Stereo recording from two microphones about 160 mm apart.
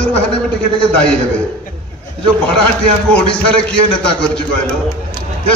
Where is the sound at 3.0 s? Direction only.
5° left (ahead or behind).